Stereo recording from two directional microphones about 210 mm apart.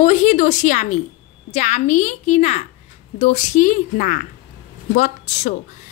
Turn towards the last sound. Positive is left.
turn(degrees=35)  # may be behind; listen again after turning